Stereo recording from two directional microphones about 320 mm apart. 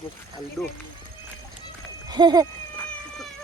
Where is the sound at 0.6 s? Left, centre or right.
Centre.